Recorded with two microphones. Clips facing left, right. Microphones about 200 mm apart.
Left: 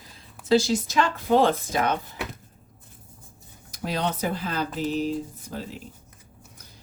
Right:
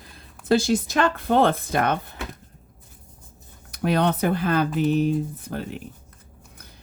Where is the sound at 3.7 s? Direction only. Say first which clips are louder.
Right 6 dB; 60° right (ahead or behind).